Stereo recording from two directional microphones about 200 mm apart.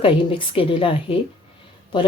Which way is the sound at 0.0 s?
25° left (ahead or behind).